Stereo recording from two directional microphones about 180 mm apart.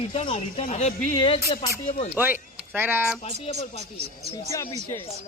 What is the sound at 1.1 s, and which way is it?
Speech, 30° left (ahead or behind).